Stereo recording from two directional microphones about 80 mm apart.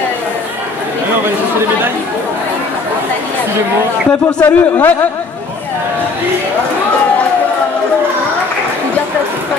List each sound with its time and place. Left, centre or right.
4.4 s a man's voice: left